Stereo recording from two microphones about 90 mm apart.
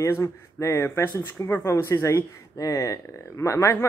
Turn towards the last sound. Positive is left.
turn(degrees=35)  # may be behind; listen again after turning